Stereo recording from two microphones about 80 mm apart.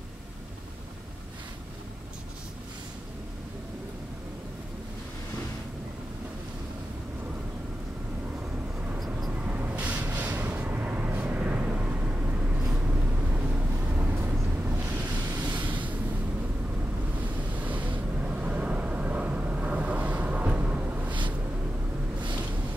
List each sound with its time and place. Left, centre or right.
9.3 s vehicle: centre
15.3 s a sound: right
17.2 s vehicle: centre